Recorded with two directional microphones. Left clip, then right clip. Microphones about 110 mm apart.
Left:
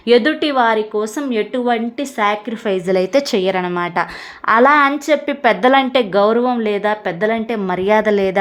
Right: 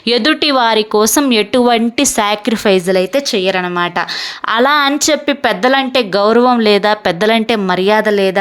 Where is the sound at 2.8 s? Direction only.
Centre (ahead or behind).